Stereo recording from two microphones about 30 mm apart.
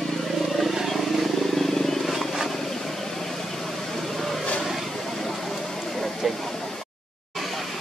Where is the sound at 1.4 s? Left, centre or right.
Centre.